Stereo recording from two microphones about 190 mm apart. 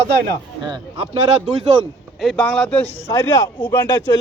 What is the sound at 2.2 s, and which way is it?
A man's voice, 5° left (ahead or behind).